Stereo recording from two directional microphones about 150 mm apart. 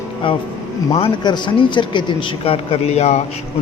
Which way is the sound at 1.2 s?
30° left (ahead or behind).